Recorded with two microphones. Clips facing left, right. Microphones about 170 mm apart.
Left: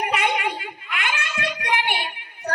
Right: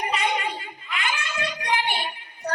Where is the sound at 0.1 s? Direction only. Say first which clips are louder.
Left 2 dB; 65° left (ahead or behind).